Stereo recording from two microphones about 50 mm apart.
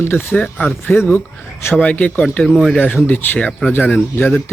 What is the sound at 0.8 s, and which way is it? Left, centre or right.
Speech, left.